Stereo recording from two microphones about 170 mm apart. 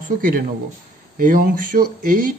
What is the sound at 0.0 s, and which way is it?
Speech, 55° right (ahead or behind).